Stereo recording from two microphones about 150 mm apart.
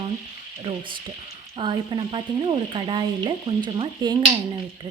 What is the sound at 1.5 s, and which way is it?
Speech, 35° right (ahead or behind).